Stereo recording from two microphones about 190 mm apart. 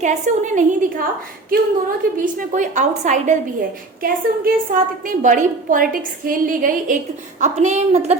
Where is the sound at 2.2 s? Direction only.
40° right (ahead or behind).